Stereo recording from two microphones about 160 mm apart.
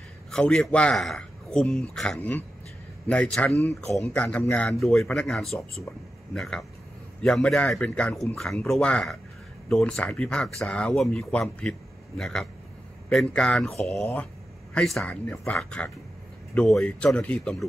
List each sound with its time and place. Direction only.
0.3 s speech: 5° left (ahead or behind)